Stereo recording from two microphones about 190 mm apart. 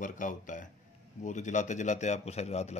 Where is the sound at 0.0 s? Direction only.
45° left (ahead or behind).